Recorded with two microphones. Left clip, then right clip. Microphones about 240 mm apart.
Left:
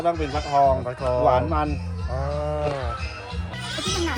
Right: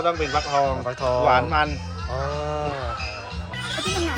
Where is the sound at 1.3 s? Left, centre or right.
Left.